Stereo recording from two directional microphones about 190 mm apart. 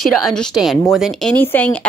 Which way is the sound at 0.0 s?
Centre (ahead or behind).